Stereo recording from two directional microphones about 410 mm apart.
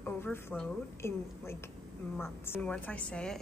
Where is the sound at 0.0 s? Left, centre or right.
Centre.